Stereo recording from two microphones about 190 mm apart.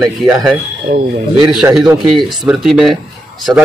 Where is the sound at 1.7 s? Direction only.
5° right (ahead or behind).